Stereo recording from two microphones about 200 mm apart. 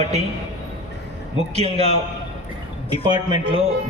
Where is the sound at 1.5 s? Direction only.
30° right (ahead or behind).